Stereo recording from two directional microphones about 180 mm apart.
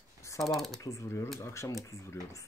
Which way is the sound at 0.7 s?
15° left (ahead or behind).